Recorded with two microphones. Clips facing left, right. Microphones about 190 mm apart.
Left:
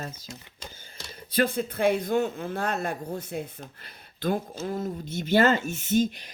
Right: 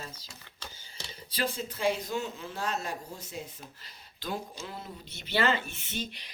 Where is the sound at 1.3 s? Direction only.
55° left (ahead or behind).